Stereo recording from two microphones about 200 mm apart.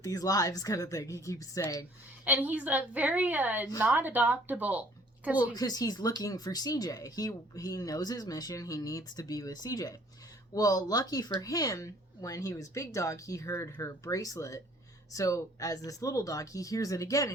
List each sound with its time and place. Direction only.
0.0 s speech: 15° left (ahead or behind)
2.5 s a woman's voice: 5° right (ahead or behind)
5.5 s speech: 20° left (ahead or behind)